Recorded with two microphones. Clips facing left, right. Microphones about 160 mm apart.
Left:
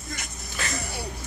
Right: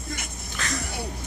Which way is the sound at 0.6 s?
5° left (ahead or behind).